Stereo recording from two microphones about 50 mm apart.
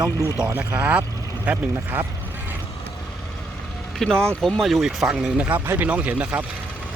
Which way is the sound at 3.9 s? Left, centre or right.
Centre.